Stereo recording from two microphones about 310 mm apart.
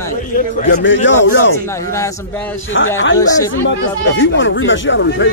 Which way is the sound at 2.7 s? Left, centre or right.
Left.